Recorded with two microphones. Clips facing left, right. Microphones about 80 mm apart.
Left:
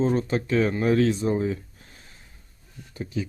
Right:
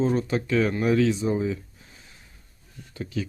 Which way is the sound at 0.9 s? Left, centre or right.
Left.